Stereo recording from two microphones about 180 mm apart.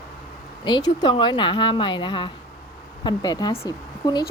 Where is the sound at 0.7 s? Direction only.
25° left (ahead or behind).